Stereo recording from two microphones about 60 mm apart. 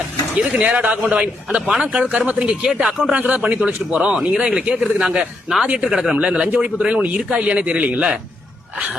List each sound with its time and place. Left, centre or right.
0.3 s a man's voice: right
3.1 s a man's voice: right
5.9 s a man's voice: centre